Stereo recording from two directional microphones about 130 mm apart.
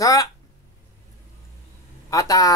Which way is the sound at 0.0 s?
25° left (ahead or behind).